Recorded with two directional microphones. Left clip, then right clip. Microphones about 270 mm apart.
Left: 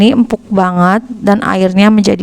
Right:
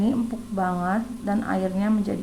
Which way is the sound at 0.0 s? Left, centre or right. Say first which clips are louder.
Left 16 dB; left.